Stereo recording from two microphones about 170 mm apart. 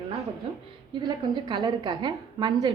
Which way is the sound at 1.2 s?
25° right (ahead or behind).